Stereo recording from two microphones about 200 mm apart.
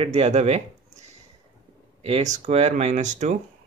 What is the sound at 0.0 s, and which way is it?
Speech, 30° right (ahead or behind).